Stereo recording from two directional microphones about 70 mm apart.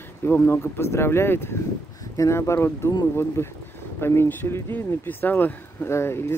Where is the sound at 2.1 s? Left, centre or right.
Left.